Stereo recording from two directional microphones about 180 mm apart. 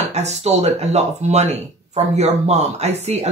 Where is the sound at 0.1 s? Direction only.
35° right (ahead or behind).